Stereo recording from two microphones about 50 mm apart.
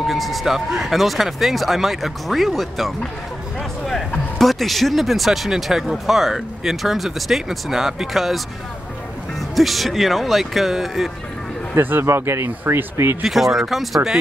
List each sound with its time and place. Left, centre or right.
0.0 s speech: centre
4.4 s speech: centre
9.6 s speech: centre
11.7 s speech: right
12.0 s speech: right
13.2 s speech: centre